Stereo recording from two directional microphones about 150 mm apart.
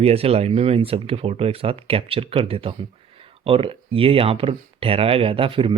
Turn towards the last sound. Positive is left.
turn(degrees=-35)  # may be behind; listen again after turning